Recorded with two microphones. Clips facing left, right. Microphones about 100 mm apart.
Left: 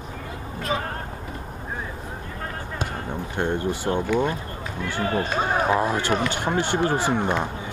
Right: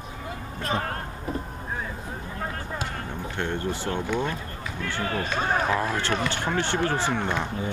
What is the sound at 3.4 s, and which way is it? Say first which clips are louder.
Speech: left 4 dB; 15° left (ahead or behind).